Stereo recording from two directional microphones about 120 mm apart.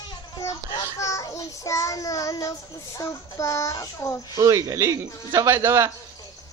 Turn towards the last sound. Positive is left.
turn(degrees=-25)  # may be behind; listen again after turning